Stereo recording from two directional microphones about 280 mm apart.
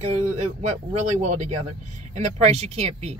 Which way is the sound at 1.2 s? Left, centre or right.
Right.